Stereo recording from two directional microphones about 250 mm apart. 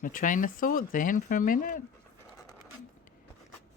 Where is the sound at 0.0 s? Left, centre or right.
Left.